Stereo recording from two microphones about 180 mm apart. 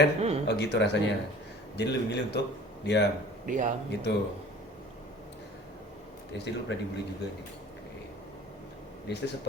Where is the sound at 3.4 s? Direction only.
45° right (ahead or behind).